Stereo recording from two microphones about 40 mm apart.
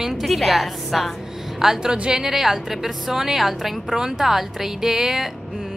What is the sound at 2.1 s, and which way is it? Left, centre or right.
A woman's voice, centre.